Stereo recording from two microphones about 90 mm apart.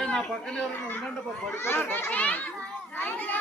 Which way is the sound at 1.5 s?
25° left (ahead or behind).